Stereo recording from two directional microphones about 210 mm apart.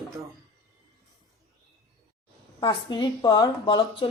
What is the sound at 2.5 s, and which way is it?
A woman's voice, 20° left (ahead or behind).